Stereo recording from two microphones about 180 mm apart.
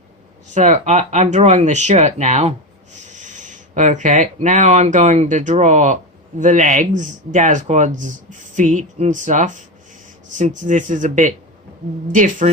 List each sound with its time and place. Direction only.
0.5 s speech: 40° right (ahead or behind)